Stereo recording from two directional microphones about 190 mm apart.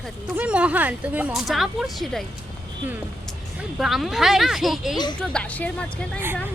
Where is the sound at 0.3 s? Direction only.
5° right (ahead or behind).